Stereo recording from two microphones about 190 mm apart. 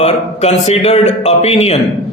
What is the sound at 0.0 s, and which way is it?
Speech, 35° left (ahead or behind).